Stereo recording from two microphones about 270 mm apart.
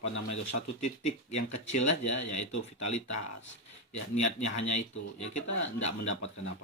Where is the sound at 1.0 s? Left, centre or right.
Left.